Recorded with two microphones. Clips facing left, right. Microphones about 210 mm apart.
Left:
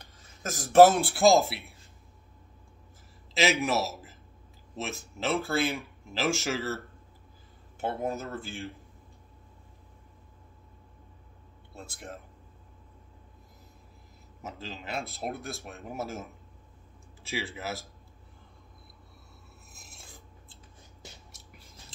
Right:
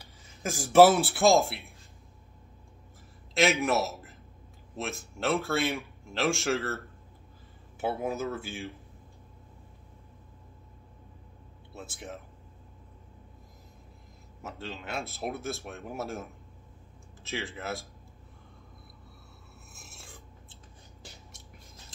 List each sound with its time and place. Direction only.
0.0 s a sound: 10° right (ahead or behind)
1.1 s speech: centre (ahead or behind)
3.6 s a man's voice: centre (ahead or behind)
7.8 s speech: 5° right (ahead or behind)
11.7 s speech: 5° right (ahead or behind)
14.4 s speech: centre (ahead or behind)
17.3 s speech: centre (ahead or behind)
19.8 s filing: centre (ahead or behind)